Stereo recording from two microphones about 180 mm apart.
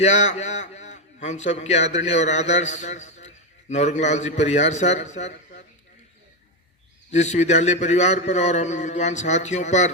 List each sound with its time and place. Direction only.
0.0 s a man's voice: 40° left (ahead or behind)
7.1 s a man's voice: 40° left (ahead or behind)